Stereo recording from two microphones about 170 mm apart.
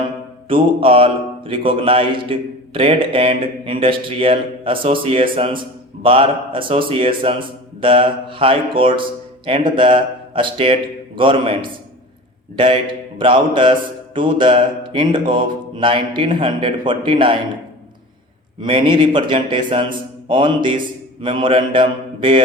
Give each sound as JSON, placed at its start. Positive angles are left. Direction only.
{"t": 0.4, "sound": "mantra", "side_deg": -30}
{"t": 18.6, "sound": "mantra", "side_deg": -30}